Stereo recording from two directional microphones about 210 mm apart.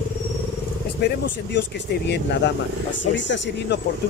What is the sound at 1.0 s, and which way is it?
Speech, 55° left (ahead or behind).